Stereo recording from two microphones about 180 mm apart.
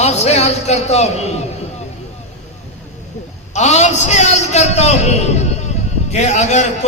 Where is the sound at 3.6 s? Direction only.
40° left (ahead or behind).